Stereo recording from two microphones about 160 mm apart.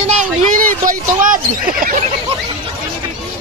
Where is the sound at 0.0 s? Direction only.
45° right (ahead or behind).